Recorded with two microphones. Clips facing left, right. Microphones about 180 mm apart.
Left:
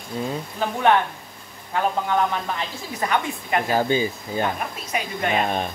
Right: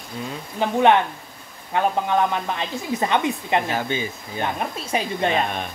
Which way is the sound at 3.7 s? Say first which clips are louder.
Left 5 dB; 35° left (ahead or behind).